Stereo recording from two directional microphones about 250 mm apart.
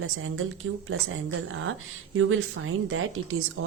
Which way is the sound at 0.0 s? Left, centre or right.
Right.